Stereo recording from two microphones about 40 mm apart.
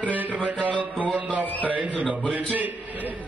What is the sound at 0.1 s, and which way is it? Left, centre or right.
Music, right.